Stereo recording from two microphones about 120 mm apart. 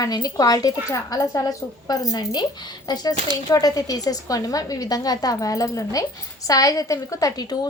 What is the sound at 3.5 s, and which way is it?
A woman's voice, 30° left (ahead or behind).